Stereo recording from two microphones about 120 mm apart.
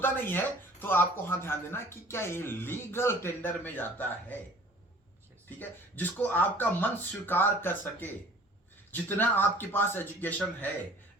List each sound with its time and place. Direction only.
0.0 s speech: 15° left (ahead or behind)
5.5 s speech: 15° left (ahead or behind)